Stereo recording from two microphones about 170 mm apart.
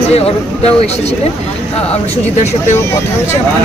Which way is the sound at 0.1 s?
35° left (ahead or behind).